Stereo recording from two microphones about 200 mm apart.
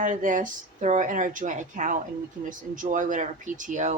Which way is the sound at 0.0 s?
40° right (ahead or behind).